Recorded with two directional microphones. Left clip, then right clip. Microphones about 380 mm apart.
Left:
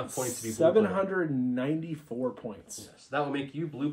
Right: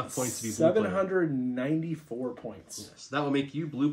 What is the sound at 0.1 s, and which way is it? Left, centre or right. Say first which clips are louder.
Speech: even; centre.